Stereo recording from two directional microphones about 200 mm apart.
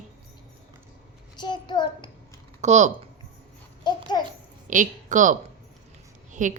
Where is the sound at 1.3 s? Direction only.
20° left (ahead or behind).